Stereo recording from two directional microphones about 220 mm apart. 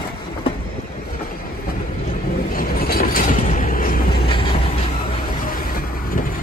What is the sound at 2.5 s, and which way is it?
Vehicle, 40° left (ahead or behind).